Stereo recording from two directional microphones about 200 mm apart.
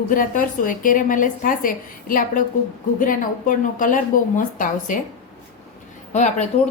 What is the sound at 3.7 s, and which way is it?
A woman's voice, 40° left (ahead or behind).